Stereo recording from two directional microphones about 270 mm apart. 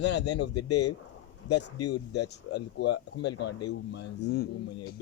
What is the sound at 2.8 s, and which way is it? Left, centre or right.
Speech, left.